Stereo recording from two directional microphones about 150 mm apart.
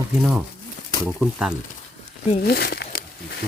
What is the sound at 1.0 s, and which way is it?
Speech, 5° right (ahead or behind).